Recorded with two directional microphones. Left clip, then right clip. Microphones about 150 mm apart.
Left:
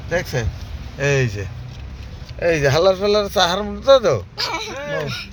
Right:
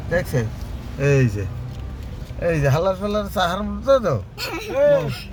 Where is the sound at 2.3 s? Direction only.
10° left (ahead or behind).